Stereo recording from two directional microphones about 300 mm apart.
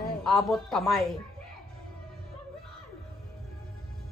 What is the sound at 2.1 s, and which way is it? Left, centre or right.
Music, centre.